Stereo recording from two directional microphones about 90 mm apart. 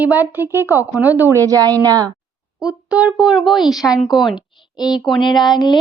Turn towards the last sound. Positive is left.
turn(degrees=50)  # may be behind; listen again after turning